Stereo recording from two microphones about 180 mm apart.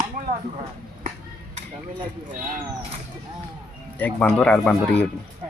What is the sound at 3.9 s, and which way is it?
Speech, 5° left (ahead or behind).